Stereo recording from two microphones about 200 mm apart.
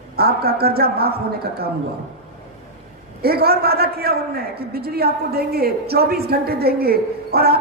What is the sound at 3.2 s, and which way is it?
A man's voice, 50° right (ahead or behind).